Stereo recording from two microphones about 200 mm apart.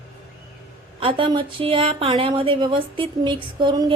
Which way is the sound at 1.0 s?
25° right (ahead or behind).